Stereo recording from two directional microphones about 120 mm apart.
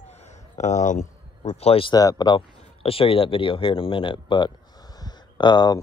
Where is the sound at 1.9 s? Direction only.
35° left (ahead or behind).